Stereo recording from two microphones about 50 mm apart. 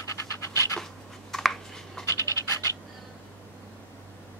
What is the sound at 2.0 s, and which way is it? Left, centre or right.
Scratch, left.